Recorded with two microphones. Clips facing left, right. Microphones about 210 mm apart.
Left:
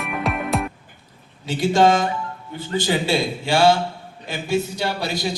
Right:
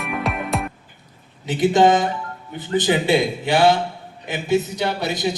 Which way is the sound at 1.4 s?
20° right (ahead or behind).